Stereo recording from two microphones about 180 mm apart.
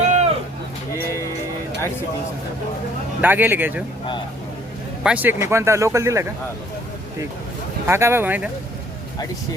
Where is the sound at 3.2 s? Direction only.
10° right (ahead or behind).